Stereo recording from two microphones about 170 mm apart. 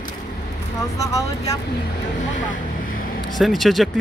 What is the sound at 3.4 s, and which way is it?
Speech, centre (ahead or behind).